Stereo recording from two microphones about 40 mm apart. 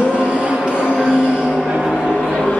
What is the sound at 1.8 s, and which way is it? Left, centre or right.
Music, centre.